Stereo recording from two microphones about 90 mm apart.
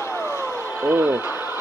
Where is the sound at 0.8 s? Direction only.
25° right (ahead or behind).